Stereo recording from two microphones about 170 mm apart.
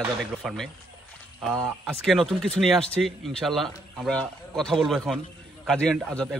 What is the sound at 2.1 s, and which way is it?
Speech, centre (ahead or behind).